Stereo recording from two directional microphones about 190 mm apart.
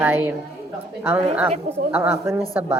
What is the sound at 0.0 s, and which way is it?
Speech, 10° right (ahead or behind).